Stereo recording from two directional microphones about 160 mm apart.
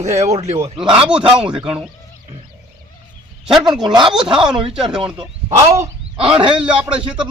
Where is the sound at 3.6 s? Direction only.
25° right (ahead or behind).